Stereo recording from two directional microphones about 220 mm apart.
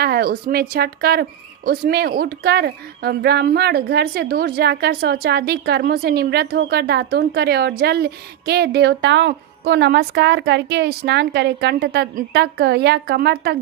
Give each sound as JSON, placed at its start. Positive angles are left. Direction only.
{"t": 0.0, "sound": "a woman's voice", "side_deg": -45}